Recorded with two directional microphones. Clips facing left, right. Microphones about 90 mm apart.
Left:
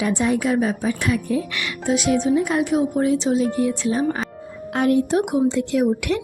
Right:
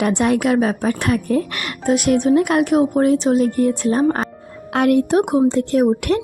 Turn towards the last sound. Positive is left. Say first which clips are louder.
# right 4 dB
turn(degrees=-50)  # may be behind; listen again after turning